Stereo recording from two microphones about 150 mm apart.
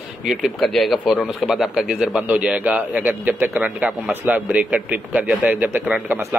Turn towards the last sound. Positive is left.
turn(degrees=-10)  # may be behind; listen again after turning